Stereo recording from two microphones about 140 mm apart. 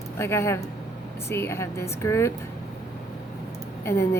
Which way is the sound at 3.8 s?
20° left (ahead or behind).